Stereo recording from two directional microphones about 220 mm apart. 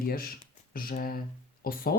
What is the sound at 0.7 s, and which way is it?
Speech, 40° left (ahead or behind).